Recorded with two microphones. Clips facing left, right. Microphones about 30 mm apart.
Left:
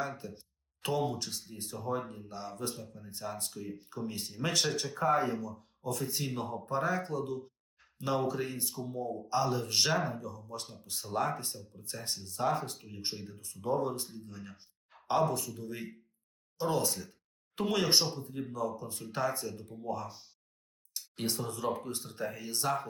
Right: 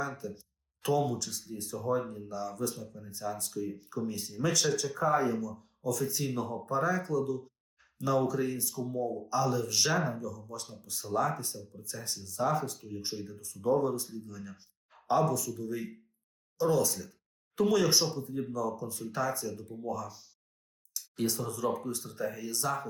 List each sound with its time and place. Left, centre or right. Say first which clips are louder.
0.0 s speech: right 1 dB; left